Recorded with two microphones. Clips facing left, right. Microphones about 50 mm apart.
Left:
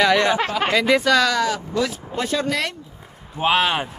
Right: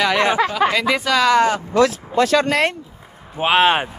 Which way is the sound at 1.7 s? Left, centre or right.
Right.